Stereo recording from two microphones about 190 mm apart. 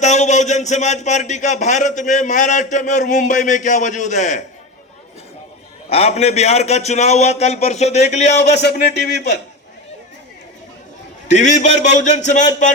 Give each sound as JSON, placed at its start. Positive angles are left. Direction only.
{"t": 0.0, "sound": "a man's voice", "side_deg": 40}
{"t": 5.9, "sound": "a man's voice", "side_deg": 30}
{"t": 11.3, "sound": "a man's voice", "side_deg": 40}